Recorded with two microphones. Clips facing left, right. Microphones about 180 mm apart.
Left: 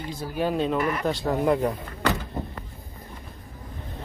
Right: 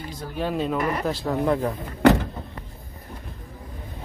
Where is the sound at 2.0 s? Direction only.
60° right (ahead or behind).